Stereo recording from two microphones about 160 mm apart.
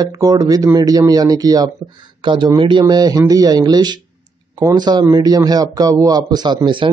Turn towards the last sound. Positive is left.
turn(degrees=-30)  # may be behind; listen again after turning